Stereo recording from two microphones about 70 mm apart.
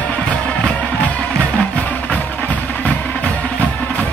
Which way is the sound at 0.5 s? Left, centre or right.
Left.